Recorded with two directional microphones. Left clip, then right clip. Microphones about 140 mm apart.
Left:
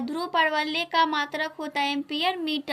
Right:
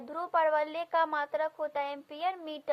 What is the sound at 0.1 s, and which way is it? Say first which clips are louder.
A woman's voice: left 3 dB; 65° right (ahead or behind).